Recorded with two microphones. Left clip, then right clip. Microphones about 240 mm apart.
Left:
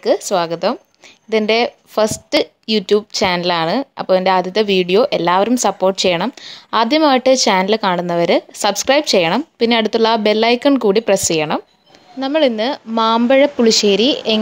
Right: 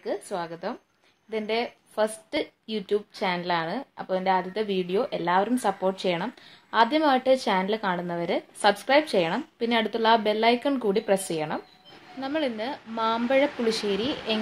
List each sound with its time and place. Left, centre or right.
0.0 s a woman's voice: left